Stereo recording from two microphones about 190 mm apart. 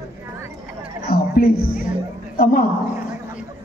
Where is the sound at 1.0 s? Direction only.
50° left (ahead or behind).